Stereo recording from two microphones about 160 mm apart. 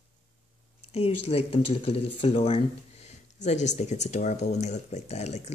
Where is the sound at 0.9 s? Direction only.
40° left (ahead or behind).